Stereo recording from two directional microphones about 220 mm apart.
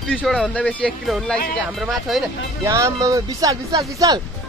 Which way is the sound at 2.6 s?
15° right (ahead or behind).